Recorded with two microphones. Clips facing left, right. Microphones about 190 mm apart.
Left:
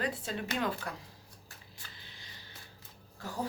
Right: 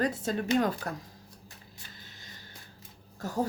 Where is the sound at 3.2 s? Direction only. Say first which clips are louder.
Right 6 dB; 45° right (ahead or behind).